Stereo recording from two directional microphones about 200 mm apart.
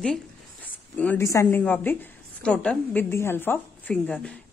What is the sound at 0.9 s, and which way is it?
A woman's voice, 10° left (ahead or behind).